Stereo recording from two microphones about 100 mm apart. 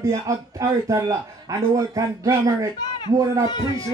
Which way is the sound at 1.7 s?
35° right (ahead or behind).